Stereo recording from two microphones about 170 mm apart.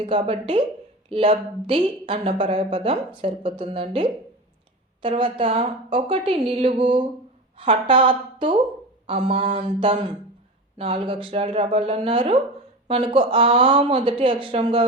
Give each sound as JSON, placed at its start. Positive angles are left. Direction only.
{"t": 0.0, "sound": "a woman's voice", "side_deg": -30}